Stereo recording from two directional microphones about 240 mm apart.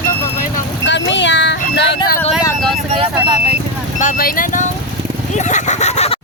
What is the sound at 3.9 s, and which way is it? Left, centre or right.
Speech, left.